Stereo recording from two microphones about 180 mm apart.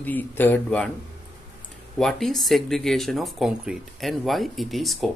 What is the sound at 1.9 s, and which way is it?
Speech, centre (ahead or behind).